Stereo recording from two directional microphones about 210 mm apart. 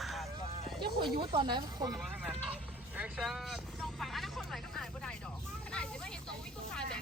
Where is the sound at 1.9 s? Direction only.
Centre (ahead or behind).